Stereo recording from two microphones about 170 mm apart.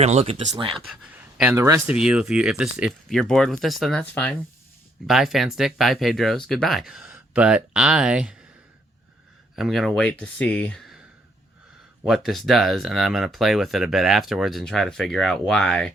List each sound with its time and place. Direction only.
0.0 s speech: 40° right (ahead or behind)
0.9 s speech: 10° right (ahead or behind)
1.9 s speech: 5° right (ahead or behind)
9.6 s speech: centre (ahead or behind)
12.0 s speech: centre (ahead or behind)